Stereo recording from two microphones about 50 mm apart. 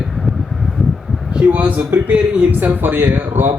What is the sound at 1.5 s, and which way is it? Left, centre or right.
Speech, right.